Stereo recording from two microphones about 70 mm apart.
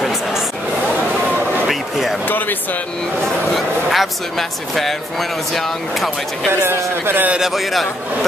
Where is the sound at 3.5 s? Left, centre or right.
Centre.